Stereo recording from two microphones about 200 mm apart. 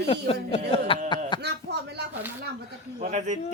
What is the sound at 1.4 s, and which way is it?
Speech, 55° right (ahead or behind).